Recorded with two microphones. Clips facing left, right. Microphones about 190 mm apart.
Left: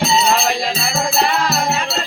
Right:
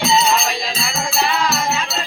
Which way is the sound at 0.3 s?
60° left (ahead or behind).